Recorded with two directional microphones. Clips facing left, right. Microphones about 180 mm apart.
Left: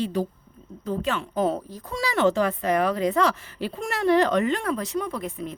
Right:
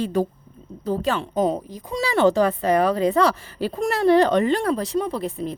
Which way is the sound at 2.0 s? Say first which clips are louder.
Right 4 dB; 30° right (ahead or behind).